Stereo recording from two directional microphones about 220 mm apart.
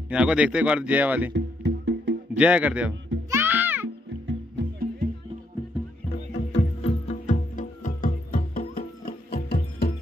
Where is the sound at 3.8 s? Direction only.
55° right (ahead or behind).